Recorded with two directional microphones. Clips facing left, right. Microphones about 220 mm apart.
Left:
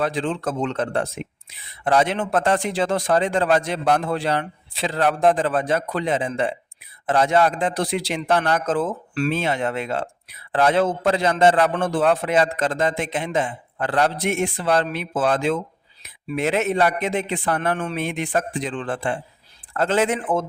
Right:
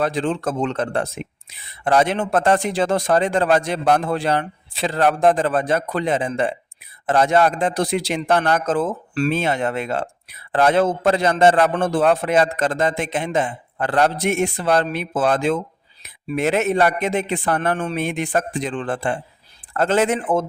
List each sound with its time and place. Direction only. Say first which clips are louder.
0.0 s a man's voice: right 2 dB; 45° right (ahead or behind)